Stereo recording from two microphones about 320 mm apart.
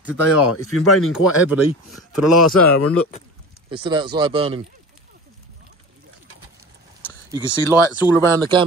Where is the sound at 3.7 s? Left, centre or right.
Centre.